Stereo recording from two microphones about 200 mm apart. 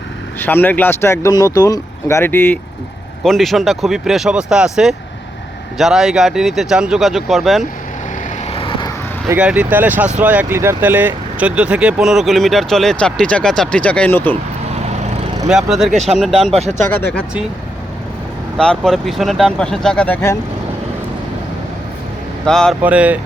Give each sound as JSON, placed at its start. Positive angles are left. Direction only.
{"t": 0.3, "sound": "speech", "side_deg": 10}
{"t": 3.2, "sound": "speech", "side_deg": 0}
{"t": 8.4, "sound": "vehicle", "side_deg": 25}
{"t": 9.3, "sound": "speech", "side_deg": -5}
{"t": 15.4, "sound": "speech", "side_deg": 0}
{"t": 15.9, "sound": "speech", "side_deg": -35}
{"t": 16.9, "sound": "speech", "side_deg": 10}
{"t": 18.5, "sound": "speech", "side_deg": 5}
{"t": 22.4, "sound": "speech", "side_deg": 5}
{"t": 22.8, "sound": "speech", "side_deg": -10}